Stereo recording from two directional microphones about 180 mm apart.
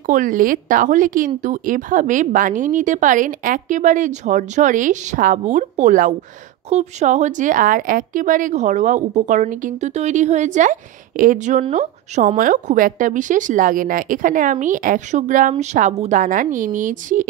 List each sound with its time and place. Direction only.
0.0 s speech: 50° right (ahead or behind)